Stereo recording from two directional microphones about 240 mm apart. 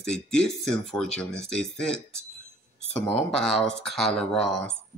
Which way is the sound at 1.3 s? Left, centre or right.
Right.